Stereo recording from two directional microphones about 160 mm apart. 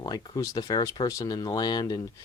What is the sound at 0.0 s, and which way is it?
Speech, 25° left (ahead or behind).